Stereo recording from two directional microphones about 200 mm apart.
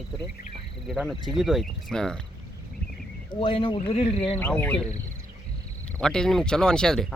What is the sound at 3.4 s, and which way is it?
Speech, 25° left (ahead or behind).